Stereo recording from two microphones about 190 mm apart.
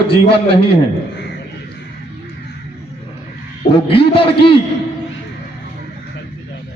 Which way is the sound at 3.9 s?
30° left (ahead or behind).